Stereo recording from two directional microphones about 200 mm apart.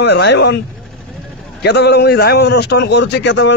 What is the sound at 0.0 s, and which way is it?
Speech, 60° left (ahead or behind).